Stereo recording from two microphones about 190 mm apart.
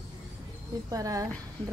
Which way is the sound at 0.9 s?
20° right (ahead or behind).